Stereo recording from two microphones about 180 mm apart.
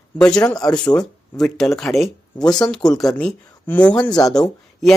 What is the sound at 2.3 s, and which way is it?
Speech, 20° left (ahead or behind).